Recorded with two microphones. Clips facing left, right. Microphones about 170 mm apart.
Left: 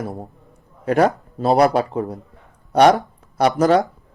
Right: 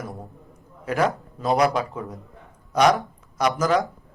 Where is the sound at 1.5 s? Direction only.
35° left (ahead or behind).